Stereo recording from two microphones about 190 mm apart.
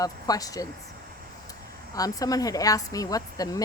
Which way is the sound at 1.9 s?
20° left (ahead or behind).